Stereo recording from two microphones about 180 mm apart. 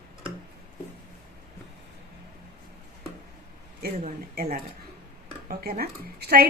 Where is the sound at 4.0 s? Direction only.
55° right (ahead or behind).